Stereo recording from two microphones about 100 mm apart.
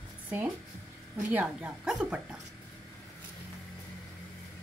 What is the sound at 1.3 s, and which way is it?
A woman's voice, 15° right (ahead or behind).